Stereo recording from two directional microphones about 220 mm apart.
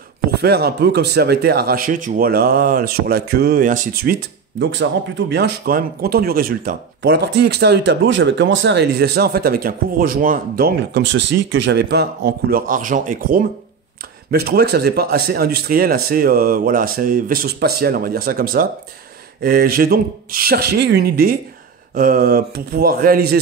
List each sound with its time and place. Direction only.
0.4 s speech: 45° right (ahead or behind)
5.3 s speech: 45° right (ahead or behind)